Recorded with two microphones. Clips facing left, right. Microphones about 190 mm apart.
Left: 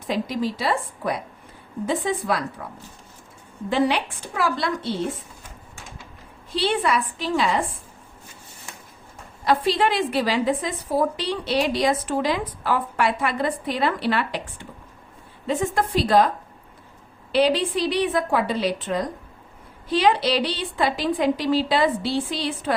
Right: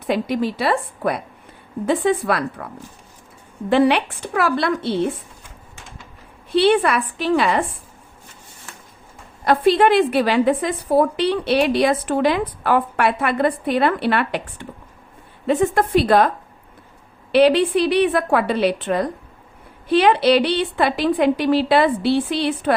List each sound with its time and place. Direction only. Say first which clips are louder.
0.1 s a woman's voice: right 4 dB; 65° right (ahead or behind)
3.7 s a woman's voice: right 6 dB; 65° right (ahead or behind)
6.5 s a woman's voice: right 7 dB; 65° right (ahead or behind)
9.4 s a woman's voice: right 6 dB; 55° right (ahead or behind)
17.3 s a woman's voice: right 6 dB; 60° right (ahead or behind)